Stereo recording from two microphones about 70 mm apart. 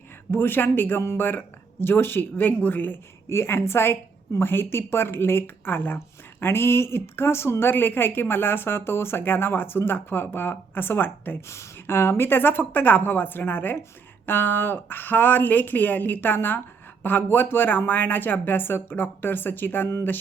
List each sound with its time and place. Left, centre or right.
0.3 s a woman's voice: left
11.4 s a woman's voice: left